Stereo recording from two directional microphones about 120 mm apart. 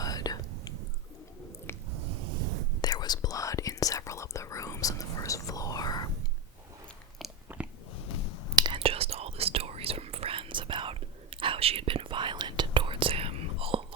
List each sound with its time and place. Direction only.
0.0 s whispering: 30° left (ahead or behind)
1.7 s squish: 20° left (ahead or behind)
2.8 s whispering: 35° left (ahead or behind)
8.5 s whispering: 35° right (ahead or behind)
8.8 s whispering: 55° right (ahead or behind)